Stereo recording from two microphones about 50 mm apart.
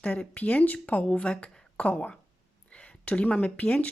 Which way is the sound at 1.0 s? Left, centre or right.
Left.